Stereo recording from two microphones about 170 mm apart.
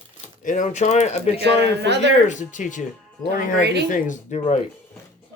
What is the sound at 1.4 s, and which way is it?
Speech, 90° right.